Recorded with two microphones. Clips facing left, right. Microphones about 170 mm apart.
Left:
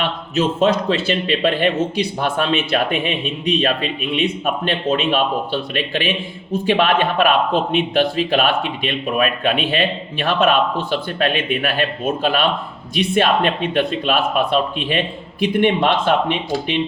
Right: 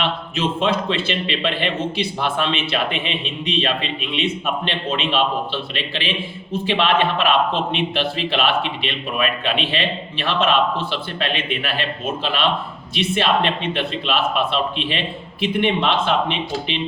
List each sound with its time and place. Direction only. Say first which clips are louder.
0.0 s a man's voice: left 3 dB; 45° left (ahead or behind)